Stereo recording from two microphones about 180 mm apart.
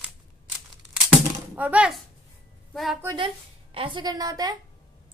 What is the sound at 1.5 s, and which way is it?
A woman's voice, 10° right (ahead or behind).